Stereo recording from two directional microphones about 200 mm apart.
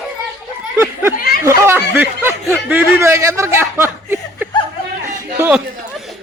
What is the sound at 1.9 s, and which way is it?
Snicker, 10° right (ahead or behind).